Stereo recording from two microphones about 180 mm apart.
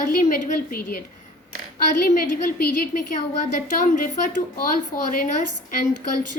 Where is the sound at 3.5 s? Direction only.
50° left (ahead or behind).